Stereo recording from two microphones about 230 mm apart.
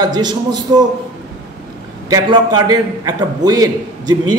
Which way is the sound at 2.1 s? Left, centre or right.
Centre.